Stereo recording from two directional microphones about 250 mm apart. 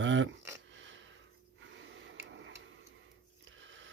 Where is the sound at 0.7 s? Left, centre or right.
Right.